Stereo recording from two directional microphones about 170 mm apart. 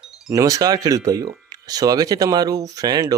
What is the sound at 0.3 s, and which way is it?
Speech, 20° right (ahead or behind).